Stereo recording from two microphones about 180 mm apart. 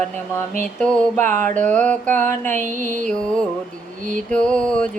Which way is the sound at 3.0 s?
5° left (ahead or behind).